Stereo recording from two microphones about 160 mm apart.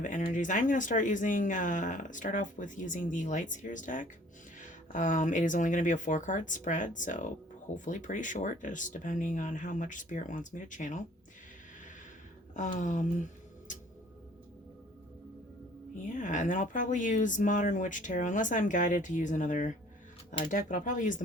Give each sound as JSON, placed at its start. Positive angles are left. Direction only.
{"t": 0.3, "sound": "speech", "side_deg": 55}
{"t": 12.5, "sound": "speech", "side_deg": 50}
{"t": 16.0, "sound": "speech", "side_deg": 55}